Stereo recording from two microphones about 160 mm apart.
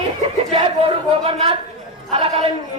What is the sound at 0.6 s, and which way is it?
Speech, 35° right (ahead or behind).